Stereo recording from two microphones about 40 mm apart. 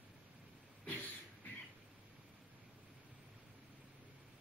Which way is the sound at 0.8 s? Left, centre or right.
Left.